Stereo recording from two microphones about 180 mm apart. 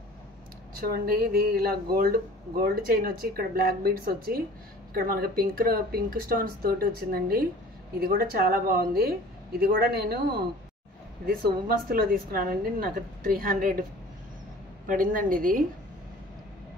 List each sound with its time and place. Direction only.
0.7 s speech: 55° right (ahead or behind)
11.2 s a woman's voice: 55° right (ahead or behind)
14.9 s a woman's voice: 50° right (ahead or behind)